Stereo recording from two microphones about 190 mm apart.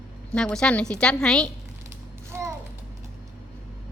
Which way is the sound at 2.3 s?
10° right (ahead or behind).